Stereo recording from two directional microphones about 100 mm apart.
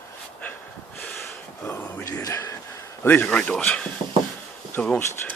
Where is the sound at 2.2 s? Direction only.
35° left (ahead or behind).